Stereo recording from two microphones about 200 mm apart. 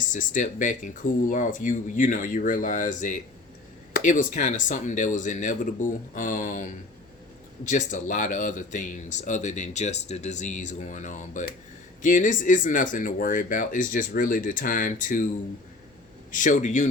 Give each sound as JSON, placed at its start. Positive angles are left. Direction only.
{"t": 0.1, "sound": "speech", "side_deg": 40}
{"t": 16.3, "sound": "speech", "side_deg": 40}